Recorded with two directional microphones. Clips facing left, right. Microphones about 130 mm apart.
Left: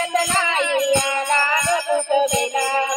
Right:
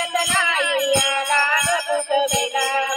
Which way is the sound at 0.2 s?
30° left (ahead or behind).